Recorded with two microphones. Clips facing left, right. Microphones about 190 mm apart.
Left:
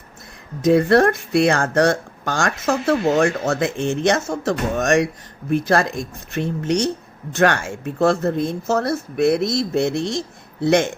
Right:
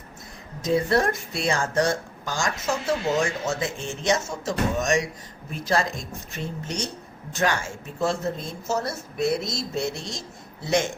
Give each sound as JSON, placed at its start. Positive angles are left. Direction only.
{"t": 0.6, "sound": "speech", "side_deg": 65}